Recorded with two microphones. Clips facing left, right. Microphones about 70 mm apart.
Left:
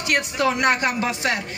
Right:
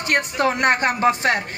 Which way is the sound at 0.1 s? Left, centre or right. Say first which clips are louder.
Right 1 dB; right.